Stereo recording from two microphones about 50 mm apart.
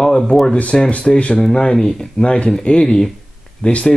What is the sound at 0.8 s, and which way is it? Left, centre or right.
Speech, left.